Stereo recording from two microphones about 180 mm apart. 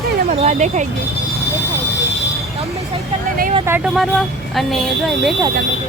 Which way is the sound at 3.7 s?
5° right (ahead or behind).